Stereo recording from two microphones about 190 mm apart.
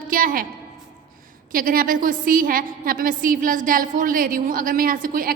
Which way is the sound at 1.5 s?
50° right (ahead or behind).